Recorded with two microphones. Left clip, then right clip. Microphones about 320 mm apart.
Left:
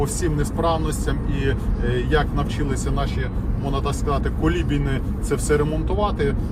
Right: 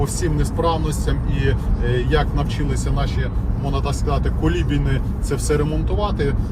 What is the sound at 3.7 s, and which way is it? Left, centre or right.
Speech, centre.